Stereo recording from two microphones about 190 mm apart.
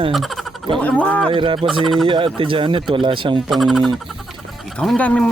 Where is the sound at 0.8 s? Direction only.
5° left (ahead or behind).